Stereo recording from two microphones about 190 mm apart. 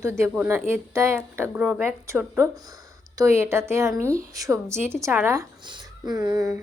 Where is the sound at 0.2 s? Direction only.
10° right (ahead or behind).